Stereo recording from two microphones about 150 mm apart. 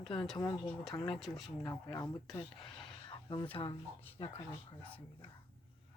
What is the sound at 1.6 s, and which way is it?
Speech, 25° left (ahead or behind).